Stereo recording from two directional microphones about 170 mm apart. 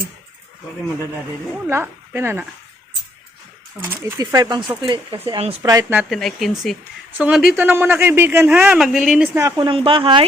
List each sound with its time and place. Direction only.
1.6 s speech: 15° right (ahead or behind)
4.2 s speech: 20° right (ahead or behind)
5.6 s speech: 20° right (ahead or behind)
6.0 s speech: centre (ahead or behind)
9.6 s speech: 30° right (ahead or behind)